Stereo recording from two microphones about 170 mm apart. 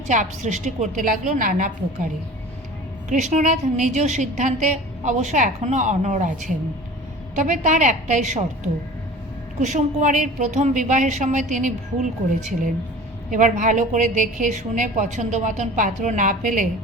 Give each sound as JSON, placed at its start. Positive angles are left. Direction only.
{"t": 0.1, "sound": "a woman's voice", "side_deg": -45}
{"t": 3.1, "sound": "a woman's voice", "side_deg": -45}
{"t": 13.3, "sound": "a woman's voice", "side_deg": -50}